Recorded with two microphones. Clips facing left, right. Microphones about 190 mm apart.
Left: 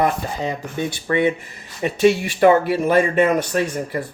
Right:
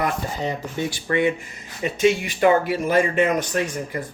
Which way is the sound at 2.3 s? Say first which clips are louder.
Left 3 dB; 55° left (ahead or behind).